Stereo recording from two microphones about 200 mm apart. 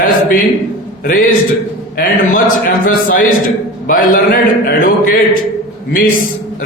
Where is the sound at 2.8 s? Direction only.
45° left (ahead or behind).